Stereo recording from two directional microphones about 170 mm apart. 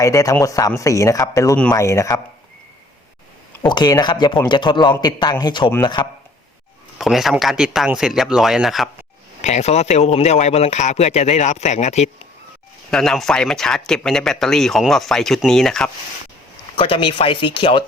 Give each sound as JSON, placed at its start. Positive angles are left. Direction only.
{"t": 0.0, "sound": "a man's voice", "side_deg": 20}
{"t": 3.6, "sound": "a man's voice", "side_deg": 25}
{"t": 7.0, "sound": "speech", "side_deg": 0}
{"t": 9.4, "sound": "speech", "side_deg": 40}
{"t": 12.9, "sound": "speech", "side_deg": 5}
{"t": 16.7, "sound": "speech", "side_deg": 30}